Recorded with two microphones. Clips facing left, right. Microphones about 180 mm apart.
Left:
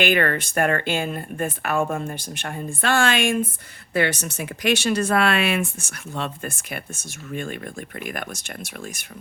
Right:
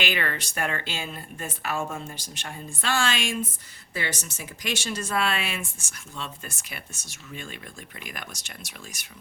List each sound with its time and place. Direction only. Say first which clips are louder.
0.0 s speech: left 9 dB; 55° left (ahead or behind)